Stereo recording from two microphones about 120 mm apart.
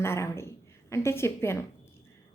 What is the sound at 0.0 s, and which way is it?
A woman's voice, 20° left (ahead or behind).